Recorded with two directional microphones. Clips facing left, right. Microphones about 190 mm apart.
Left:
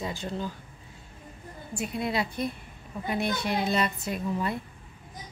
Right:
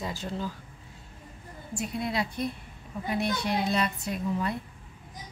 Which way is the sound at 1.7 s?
Centre (ahead or behind).